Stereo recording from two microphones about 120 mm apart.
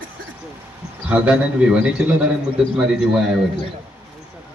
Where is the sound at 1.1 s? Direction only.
10° right (ahead or behind).